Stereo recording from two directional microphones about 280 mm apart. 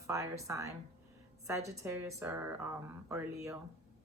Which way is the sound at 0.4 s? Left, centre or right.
Centre.